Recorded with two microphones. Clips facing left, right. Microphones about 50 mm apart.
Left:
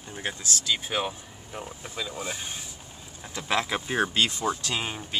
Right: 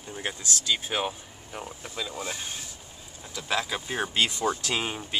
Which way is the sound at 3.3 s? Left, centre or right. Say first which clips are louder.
Left 2 dB; left.